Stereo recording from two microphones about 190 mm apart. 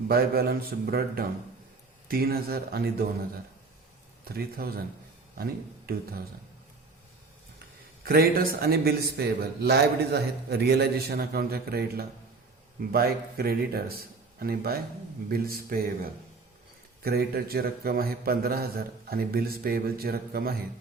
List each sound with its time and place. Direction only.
0.1 s a man's voice: 55° right (ahead or behind)
4.3 s a man's voice: 55° right (ahead or behind)
8.0 s a man's voice: 50° right (ahead or behind)
17.0 s a man's voice: 55° right (ahead or behind)